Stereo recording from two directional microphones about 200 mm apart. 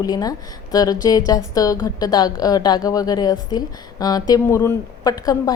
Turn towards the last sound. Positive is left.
turn(degrees=15)  # may be behind; listen again after turning